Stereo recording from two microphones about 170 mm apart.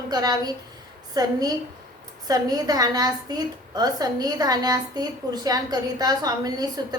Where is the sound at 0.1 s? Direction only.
25° right (ahead or behind).